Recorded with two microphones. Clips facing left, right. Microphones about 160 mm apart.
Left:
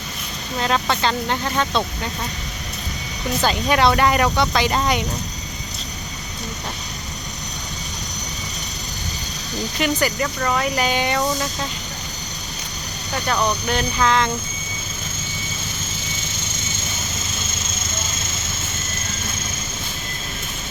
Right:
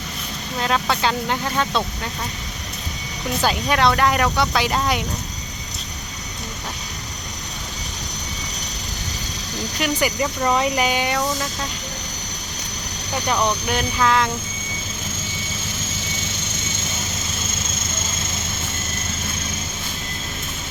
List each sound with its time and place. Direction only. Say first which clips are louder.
0.6 s speech: even; centre (ahead or behind)
3.4 s speech: left 1 dB; centre (ahead or behind)
9.8 s speech: even; 15° right (ahead or behind)
10.8 s speech: left 1 dB; 5° right (ahead or behind)
13.2 s speech: even; 15° right (ahead or behind)